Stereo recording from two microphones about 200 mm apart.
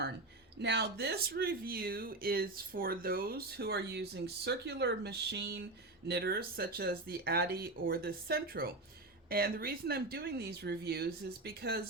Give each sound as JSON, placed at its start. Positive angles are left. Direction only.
{"t": 0.6, "sound": "speech", "side_deg": -55}